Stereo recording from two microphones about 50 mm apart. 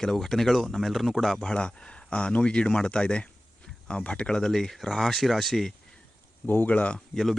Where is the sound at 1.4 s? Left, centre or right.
Centre.